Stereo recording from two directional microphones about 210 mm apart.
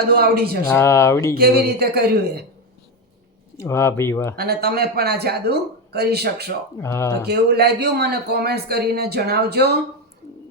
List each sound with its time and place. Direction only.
0.2 s a man's voice: 45° right (ahead or behind)
0.7 s speech: 10° left (ahead or behind)
1.4 s a man's voice: 50° right (ahead or behind)
3.6 s speech: 15° left (ahead or behind)
4.4 s a man's voice: 45° right (ahead or behind)
6.7 s speech: 10° left (ahead or behind)
7.3 s a man's voice: 50° right (ahead or behind)